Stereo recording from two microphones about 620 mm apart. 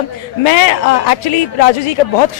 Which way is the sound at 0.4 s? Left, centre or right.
Left.